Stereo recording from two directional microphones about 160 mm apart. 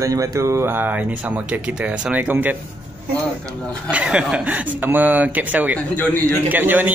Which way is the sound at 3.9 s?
5° right (ahead or behind).